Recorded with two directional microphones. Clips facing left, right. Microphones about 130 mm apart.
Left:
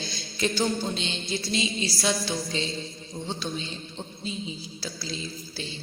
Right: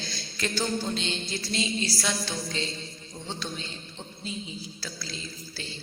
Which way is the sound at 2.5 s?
20° left (ahead or behind).